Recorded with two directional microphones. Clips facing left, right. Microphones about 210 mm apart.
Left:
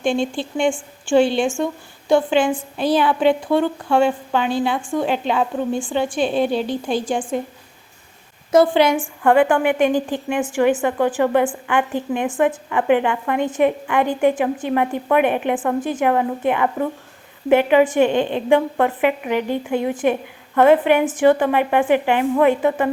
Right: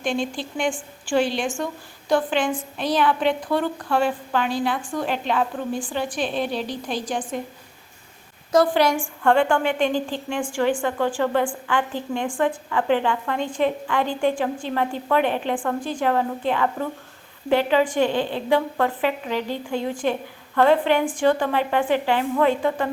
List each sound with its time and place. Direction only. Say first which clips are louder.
0.0 s a woman's voice: left 5 dB; 30° left (ahead or behind)
5.2 s a woman's voice: left 3 dB; centre (ahead or behind)
5.7 s speech: left 5 dB; 25° left (ahead or behind)
6.4 s a woman's voice: left 6 dB; centre (ahead or behind)
7.0 s speech: left 5 dB; 30° left (ahead or behind)
8.5 s a woman's voice: left 4 dB; 25° left (ahead or behind)